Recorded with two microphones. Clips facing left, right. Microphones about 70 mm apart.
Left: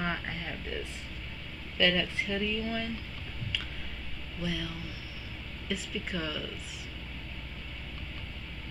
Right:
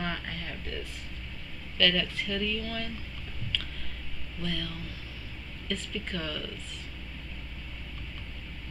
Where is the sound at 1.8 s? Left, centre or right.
Left.